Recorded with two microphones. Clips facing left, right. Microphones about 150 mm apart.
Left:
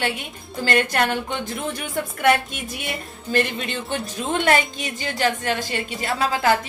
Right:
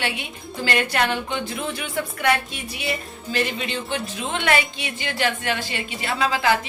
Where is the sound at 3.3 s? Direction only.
50° left (ahead or behind).